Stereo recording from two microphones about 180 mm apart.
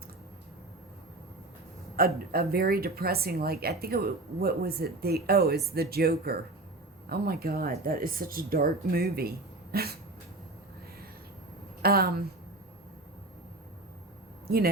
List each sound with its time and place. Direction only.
2.0 s speech: 55° right (ahead or behind)
11.8 s speech: 60° right (ahead or behind)